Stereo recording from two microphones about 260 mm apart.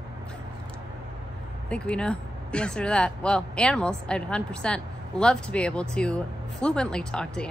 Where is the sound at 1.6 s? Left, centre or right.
Centre.